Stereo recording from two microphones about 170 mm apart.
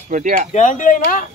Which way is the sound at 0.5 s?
50° left (ahead or behind).